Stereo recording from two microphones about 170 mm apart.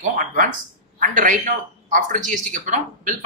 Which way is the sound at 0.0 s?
50° right (ahead or behind).